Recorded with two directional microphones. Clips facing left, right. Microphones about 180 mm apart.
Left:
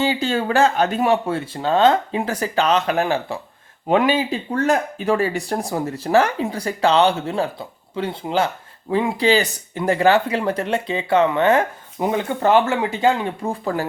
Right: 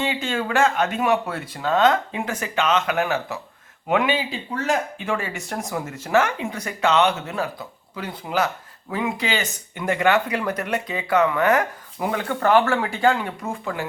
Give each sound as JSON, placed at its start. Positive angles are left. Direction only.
{"t": 0.0, "sound": "speech", "side_deg": 35}